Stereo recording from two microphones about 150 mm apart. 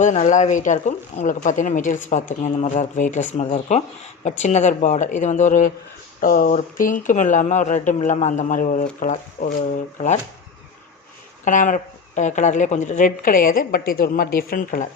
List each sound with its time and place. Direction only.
0.0 s speech: 55° left (ahead or behind)
6.1 s speech: 65° left (ahead or behind)
11.4 s speech: 60° left (ahead or behind)